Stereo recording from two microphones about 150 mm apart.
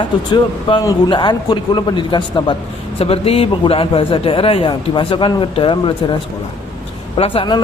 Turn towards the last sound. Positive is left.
turn(degrees=35)  # may be behind; listen again after turning